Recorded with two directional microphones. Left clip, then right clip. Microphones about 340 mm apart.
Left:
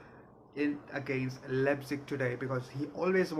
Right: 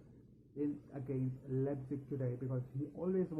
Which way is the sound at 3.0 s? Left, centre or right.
Centre.